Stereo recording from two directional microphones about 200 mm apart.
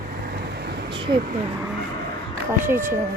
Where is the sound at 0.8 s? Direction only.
25° right (ahead or behind).